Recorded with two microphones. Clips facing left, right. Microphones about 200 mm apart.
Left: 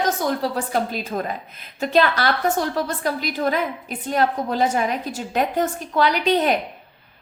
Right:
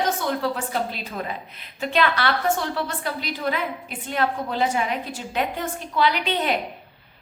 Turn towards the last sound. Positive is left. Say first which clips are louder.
# left 4 dB
turn(degrees=40)  # may be behind; listen again after turning